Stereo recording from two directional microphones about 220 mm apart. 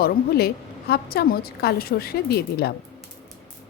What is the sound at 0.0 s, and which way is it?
A woman's voice, 45° left (ahead or behind).